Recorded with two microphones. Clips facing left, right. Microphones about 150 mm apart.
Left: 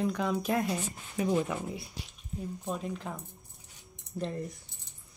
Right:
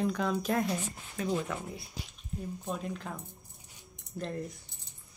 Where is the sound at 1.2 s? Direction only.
15° left (ahead or behind).